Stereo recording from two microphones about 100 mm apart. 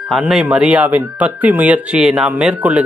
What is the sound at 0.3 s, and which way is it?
Speech, 5° right (ahead or behind).